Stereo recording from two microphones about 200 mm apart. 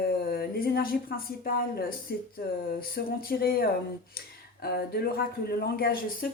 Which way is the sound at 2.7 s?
50° left (ahead or behind).